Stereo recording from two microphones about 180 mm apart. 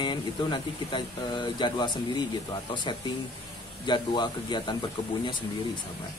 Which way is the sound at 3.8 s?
25° left (ahead or behind).